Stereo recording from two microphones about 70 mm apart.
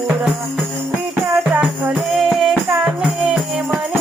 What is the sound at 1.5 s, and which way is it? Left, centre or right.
Music, right.